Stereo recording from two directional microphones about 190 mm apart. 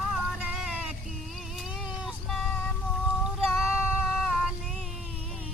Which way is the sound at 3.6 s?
Centre (ahead or behind).